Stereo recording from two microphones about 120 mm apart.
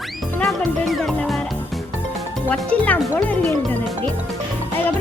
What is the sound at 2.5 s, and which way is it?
Speech, 10° left (ahead or behind).